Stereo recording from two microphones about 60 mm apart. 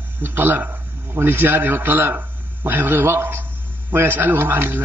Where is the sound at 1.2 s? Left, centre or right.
Right.